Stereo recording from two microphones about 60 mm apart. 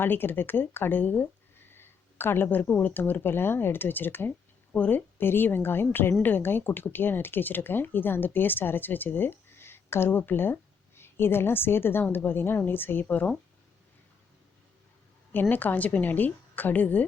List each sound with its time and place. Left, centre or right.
0.0 s speech: left
15.3 s a woman's voice: left